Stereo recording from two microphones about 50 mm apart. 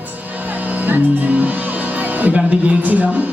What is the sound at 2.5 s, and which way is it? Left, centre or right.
Speech, right.